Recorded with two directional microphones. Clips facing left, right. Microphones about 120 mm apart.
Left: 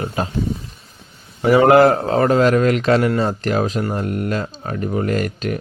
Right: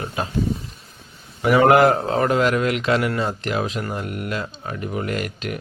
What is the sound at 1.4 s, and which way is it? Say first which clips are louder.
Speech: left 3 dB; 30° left (ahead or behind).